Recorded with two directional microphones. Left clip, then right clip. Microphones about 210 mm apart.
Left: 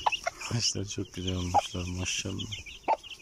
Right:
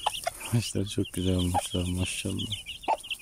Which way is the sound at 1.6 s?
15° right (ahead or behind).